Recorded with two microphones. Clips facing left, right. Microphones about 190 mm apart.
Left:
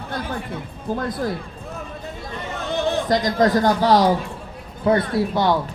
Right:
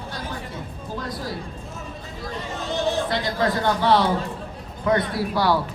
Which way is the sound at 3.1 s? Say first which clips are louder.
Left 6 dB; 40° left (ahead or behind).